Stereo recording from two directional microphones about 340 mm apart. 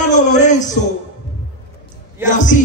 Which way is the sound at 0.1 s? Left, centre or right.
Left.